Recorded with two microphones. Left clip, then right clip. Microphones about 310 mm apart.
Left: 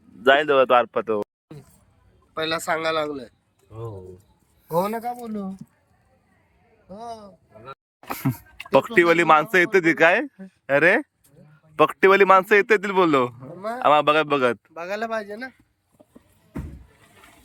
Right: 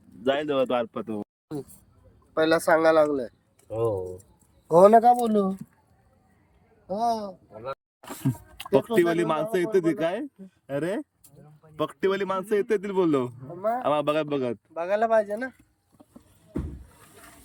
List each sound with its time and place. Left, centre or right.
0.2 s speech: centre
2.3 s speech: centre
4.7 s speech: centre
7.0 s a man's voice: right
9.0 s speech: centre